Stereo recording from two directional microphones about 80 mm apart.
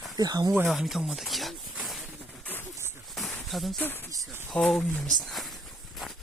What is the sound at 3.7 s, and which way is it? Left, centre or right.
Speech, left.